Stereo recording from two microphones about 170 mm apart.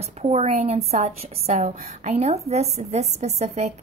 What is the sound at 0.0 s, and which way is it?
A woman's voice, 40° right (ahead or behind).